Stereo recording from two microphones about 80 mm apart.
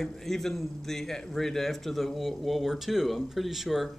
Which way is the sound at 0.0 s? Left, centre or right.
Centre.